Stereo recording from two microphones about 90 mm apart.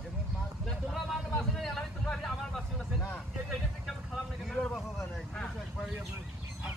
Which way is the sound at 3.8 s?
Centre (ahead or behind).